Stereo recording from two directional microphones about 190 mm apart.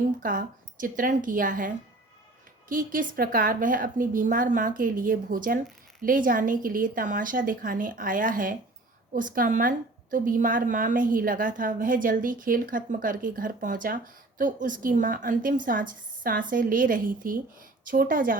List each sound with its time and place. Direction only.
0.2 s a woman's voice: 45° right (ahead or behind)